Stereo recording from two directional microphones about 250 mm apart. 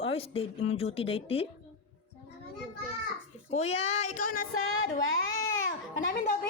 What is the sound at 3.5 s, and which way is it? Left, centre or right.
Speech, left.